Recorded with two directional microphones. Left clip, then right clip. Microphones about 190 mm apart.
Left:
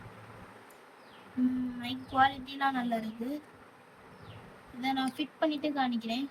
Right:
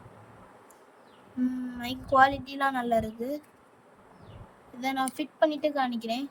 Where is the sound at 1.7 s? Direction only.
25° right (ahead or behind).